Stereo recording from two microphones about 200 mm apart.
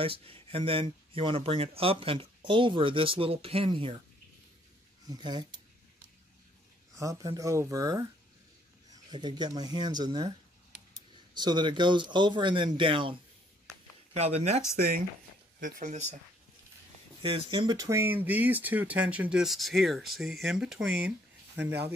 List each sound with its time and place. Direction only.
0.0 s speech: 30° right (ahead or behind)
5.0 s speech: 20° right (ahead or behind)
7.0 s speech: 15° right (ahead or behind); by 14.6 s 35° right (ahead or behind)
15.6 s speech: 35° right (ahead or behind)
17.2 s speech: 30° right (ahead or behind); by 20.9 s 5° right (ahead or behind)